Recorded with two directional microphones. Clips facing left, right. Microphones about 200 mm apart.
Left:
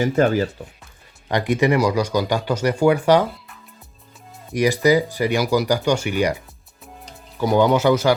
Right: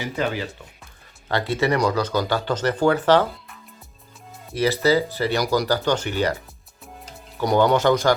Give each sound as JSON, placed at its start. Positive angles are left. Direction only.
{"t": 0.0, "sound": "speech", "side_deg": 45}
{"t": 1.3, "sound": "speech", "side_deg": 15}
{"t": 4.5, "sound": "speech", "side_deg": 15}
{"t": 7.4, "sound": "speech", "side_deg": 5}